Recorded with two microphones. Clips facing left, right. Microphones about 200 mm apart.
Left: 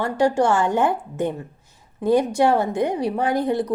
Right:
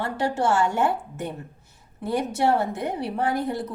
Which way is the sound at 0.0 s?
15° left (ahead or behind).